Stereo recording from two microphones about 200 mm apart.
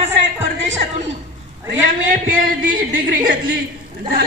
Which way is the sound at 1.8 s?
40° right (ahead or behind).